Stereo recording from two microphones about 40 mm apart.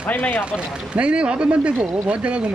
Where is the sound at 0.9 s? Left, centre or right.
Right.